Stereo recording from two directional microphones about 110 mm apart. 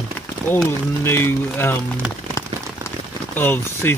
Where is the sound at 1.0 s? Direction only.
20° left (ahead or behind).